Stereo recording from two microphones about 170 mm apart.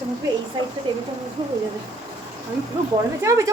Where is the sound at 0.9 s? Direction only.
30° right (ahead or behind).